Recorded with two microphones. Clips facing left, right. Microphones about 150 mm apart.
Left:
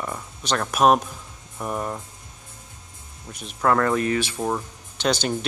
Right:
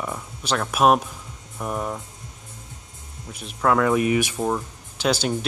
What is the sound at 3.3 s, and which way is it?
Speech, centre (ahead or behind).